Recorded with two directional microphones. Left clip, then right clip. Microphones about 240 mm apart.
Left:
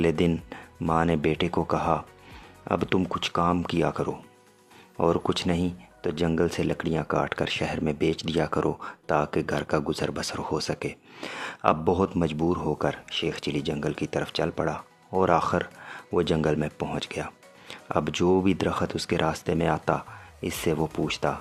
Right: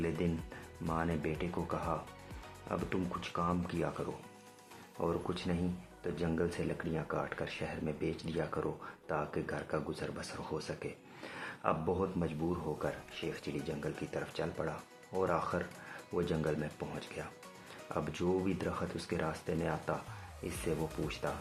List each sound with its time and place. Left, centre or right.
0.2 s speech: left